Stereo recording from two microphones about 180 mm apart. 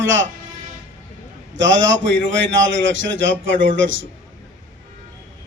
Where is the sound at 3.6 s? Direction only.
90° right.